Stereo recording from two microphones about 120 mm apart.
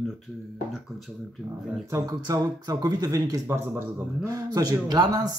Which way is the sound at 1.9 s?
30° right (ahead or behind).